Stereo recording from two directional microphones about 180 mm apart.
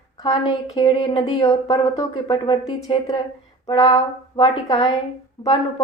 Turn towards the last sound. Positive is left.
turn(degrees=25)  # may be behind; listen again after turning